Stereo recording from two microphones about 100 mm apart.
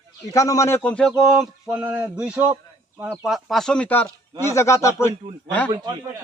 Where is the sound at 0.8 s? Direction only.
10° left (ahead or behind).